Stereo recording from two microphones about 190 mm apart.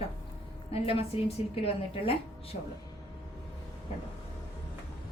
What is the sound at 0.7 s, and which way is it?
A woman's voice, 30° left (ahead or behind).